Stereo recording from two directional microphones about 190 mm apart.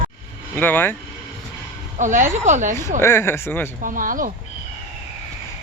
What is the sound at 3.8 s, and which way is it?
Speech, 45° right (ahead or behind).